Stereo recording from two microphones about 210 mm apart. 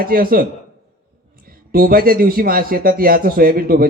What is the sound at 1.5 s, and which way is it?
Speech, 45° right (ahead or behind).